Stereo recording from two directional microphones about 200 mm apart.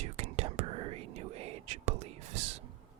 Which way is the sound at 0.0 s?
30° right (ahead or behind).